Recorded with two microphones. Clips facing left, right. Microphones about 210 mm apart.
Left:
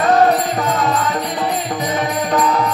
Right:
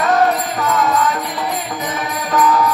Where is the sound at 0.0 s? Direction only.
30° left (ahead or behind).